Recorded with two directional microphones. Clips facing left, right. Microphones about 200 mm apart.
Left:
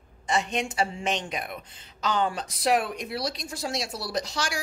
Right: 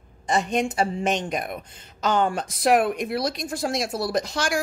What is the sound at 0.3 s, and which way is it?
A woman's voice, 45° right (ahead or behind).